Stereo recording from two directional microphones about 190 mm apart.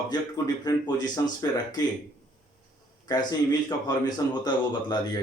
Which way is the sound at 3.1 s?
20° left (ahead or behind).